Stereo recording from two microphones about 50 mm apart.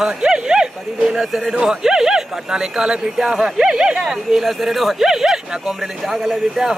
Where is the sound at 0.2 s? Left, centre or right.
Centre.